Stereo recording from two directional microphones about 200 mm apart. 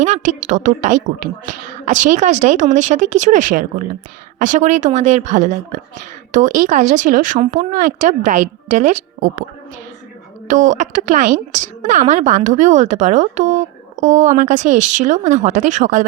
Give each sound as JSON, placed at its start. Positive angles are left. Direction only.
{"t": 0.0, "sound": "speech", "side_deg": -35}
{"t": 10.5, "sound": "speech", "side_deg": -40}